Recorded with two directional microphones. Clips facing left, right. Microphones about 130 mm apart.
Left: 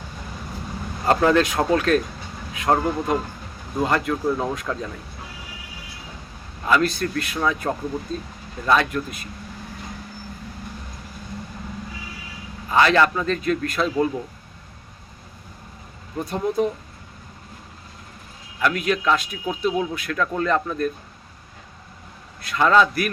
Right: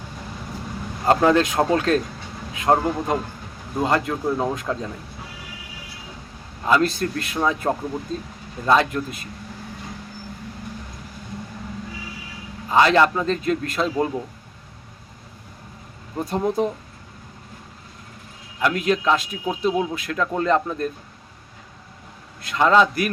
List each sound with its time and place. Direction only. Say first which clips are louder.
1.0 s speech: right 1 dB; 25° right (ahead or behind)
6.7 s speech: right 1 dB; 30° right (ahead or behind)
12.7 s speech: right 1 dB; 25° right (ahead or behind)
16.1 s speech: right 1 dB; 30° right (ahead or behind)
18.6 s speech: right 1 dB; 30° right (ahead or behind)
22.4 s speech: right 1 dB; 25° right (ahead or behind)